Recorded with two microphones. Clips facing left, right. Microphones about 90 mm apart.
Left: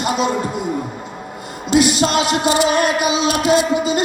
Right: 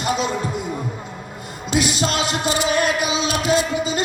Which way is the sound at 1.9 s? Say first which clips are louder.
Left 5 dB; 65° left (ahead or behind).